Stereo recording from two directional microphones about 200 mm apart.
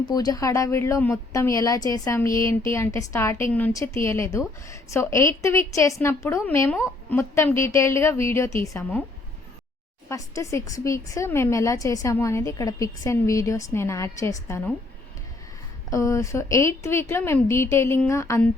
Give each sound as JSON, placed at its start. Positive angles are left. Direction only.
{"t": 0.1, "sound": "speech", "side_deg": 20}
{"t": 10.1, "sound": "speech", "side_deg": 15}
{"t": 15.9, "sound": "speech", "side_deg": 15}